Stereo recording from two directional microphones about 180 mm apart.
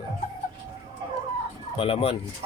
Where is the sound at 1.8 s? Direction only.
30° left (ahead or behind).